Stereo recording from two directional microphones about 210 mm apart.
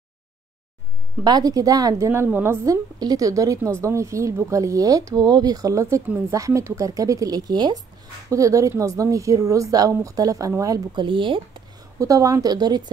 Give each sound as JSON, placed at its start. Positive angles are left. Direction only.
{"t": 1.2, "sound": "a woman's voice", "side_deg": -20}